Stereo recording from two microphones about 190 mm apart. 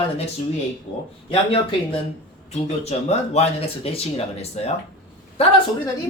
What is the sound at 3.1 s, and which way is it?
Speech, 30° left (ahead or behind).